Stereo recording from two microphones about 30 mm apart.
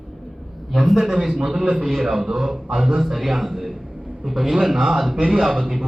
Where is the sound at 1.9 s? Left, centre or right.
Centre.